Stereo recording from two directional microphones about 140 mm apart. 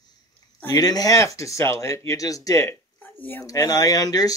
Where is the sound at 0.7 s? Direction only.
25° left (ahead or behind).